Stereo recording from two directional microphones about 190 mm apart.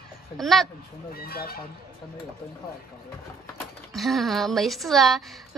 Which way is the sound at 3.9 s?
Centre (ahead or behind).